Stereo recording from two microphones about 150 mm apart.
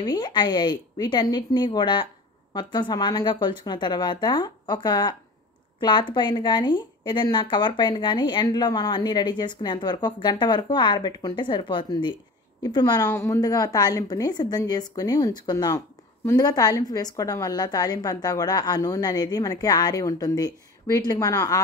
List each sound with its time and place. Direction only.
0.0 s a woman's voice: 30° left (ahead or behind)